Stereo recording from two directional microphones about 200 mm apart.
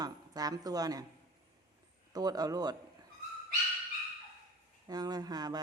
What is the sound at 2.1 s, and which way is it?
Speech, 20° right (ahead or behind).